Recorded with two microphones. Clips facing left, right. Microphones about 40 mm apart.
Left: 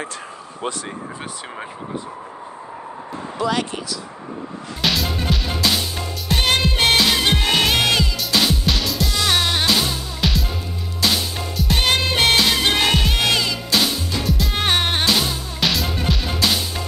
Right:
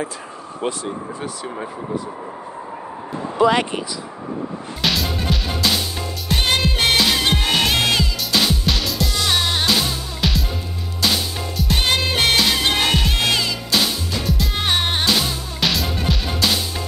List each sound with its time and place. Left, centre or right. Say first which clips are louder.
3.3 s speech: right 6 dB; right
4.8 s music: even; centre
7.2 s music: left 1 dB; centre
12.6 s music: left 1 dB; centre
12.9 s music: even; centre
14.5 s music: left 1 dB; centre
14.9 s music: even; centre